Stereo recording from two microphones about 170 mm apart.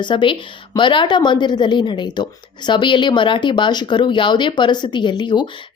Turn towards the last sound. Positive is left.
turn(degrees=25)  # may be behind; listen again after turning